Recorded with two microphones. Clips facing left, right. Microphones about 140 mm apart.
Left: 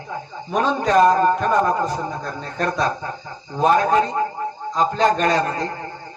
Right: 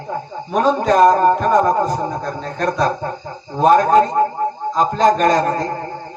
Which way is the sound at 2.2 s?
Centre (ahead or behind).